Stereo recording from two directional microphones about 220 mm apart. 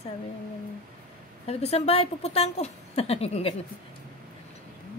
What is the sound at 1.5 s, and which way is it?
Speech, 30° left (ahead or behind).